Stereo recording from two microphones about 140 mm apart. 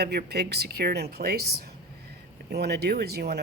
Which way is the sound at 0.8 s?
90° right.